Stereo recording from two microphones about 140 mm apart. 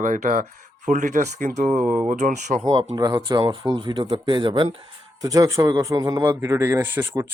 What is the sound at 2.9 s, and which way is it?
A man's voice, 30° right (ahead or behind).